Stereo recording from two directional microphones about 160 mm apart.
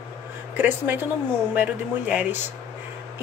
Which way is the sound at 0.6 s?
10° right (ahead or behind).